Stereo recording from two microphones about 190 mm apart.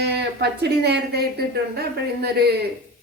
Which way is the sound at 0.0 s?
60° right (ahead or behind).